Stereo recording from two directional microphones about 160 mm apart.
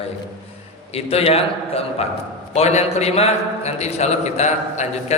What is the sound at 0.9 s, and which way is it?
A man's voice, 40° left (ahead or behind).